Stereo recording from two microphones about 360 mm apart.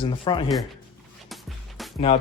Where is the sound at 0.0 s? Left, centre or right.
Centre.